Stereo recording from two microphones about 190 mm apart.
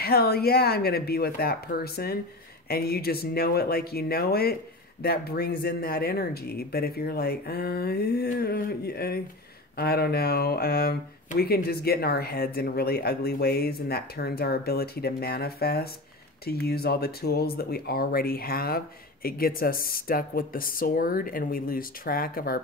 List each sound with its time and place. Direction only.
0.0 s speech: 55° left (ahead or behind)